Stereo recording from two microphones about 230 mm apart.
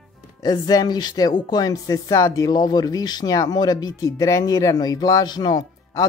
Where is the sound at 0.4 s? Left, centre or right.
Centre.